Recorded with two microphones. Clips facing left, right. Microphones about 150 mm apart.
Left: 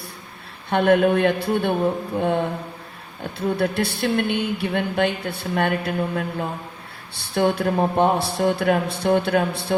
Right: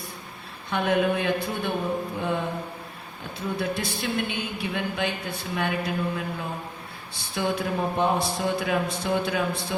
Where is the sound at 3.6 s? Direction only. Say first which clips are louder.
Left 6 dB; 60° left (ahead or behind).